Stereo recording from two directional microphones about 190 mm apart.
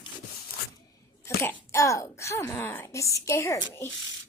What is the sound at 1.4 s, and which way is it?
Speech, 15° left (ahead or behind).